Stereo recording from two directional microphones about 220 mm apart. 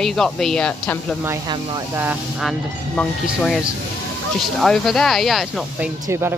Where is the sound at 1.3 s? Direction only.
15° right (ahead or behind).